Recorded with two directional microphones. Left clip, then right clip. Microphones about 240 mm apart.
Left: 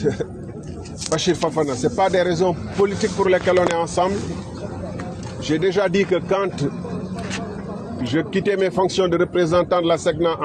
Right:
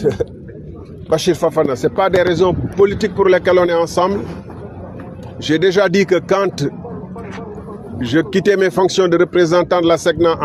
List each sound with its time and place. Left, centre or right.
1.1 s speech: right
5.4 s speech: right
8.0 s speech: right